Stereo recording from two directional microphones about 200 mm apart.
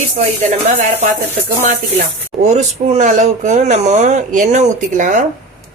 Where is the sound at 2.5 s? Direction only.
35° right (ahead or behind).